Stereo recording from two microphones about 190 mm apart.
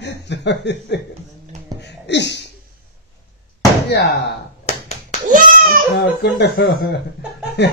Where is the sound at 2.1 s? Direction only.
65° left (ahead or behind).